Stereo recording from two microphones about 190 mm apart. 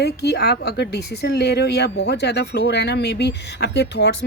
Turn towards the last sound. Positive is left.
turn(degrees=65)  # may be behind; listen again after turning